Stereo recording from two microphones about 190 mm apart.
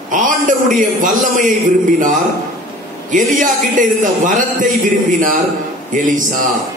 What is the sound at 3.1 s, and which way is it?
Speech, 40° right (ahead or behind).